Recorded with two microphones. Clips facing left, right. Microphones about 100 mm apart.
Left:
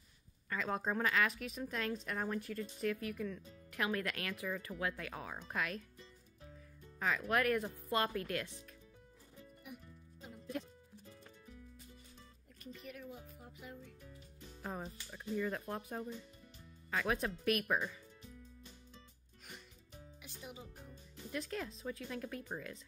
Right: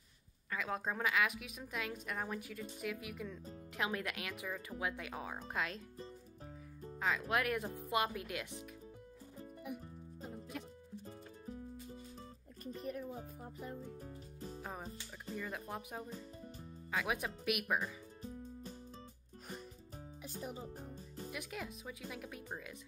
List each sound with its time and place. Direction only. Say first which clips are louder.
0.5 s a woman's voice: left 2 dB; 5° right (ahead or behind); by 5.9 s 25° right (ahead or behind)
7.0 s a woman's voice: left 1 dB; 20° right (ahead or behind)
11.1 s music: right 6 dB; 35° right (ahead or behind)
12.6 s speech: right 6 dB; 40° right (ahead or behind)
14.6 s music: left 5 dB; centre (ahead or behind)
15.3 s a woman's voice: left 5 dB; centre (ahead or behind)
18.2 s music: right 9 dB; 40° right (ahead or behind)
20.2 s music: right 6 dB; 40° right (ahead or behind)
21.3 s a woman's voice: left 5 dB; 10° right (ahead or behind)